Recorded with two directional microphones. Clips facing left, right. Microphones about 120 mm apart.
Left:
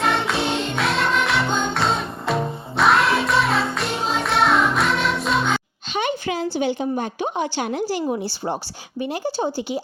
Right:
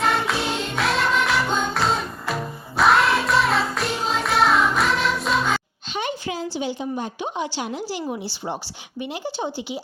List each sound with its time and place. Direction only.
0.0 s music: centre (ahead or behind)
5.9 s speech: 70° left (ahead or behind); by 8.0 s 55° left (ahead or behind)
9.0 s speech: 40° left (ahead or behind)